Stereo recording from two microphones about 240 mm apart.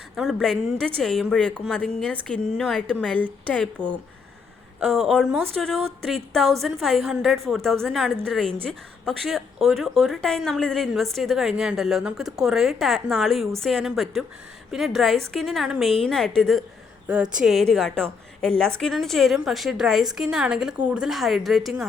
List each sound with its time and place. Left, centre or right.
0.2 s speech: centre